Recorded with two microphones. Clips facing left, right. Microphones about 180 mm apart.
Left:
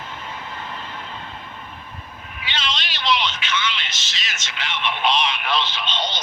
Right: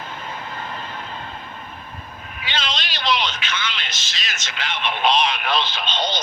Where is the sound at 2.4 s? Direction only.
45° right (ahead or behind).